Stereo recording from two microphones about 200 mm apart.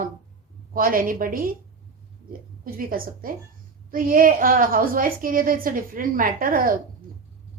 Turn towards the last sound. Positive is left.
turn(degrees=-45)  # may be behind; listen again after turning